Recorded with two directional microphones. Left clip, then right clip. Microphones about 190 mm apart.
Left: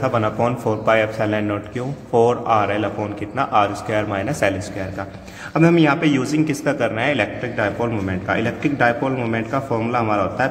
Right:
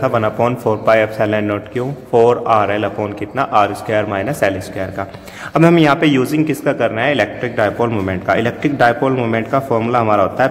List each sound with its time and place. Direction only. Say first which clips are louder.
0.0 s a man's voice: right 4 dB; 20° right (ahead or behind)
5.5 s a man's voice: right 4 dB; 35° right (ahead or behind)